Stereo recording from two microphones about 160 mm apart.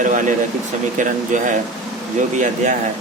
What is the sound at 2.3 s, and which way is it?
Speech, 50° right (ahead or behind).